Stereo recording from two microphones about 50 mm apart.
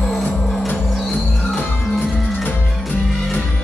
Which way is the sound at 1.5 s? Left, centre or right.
Left.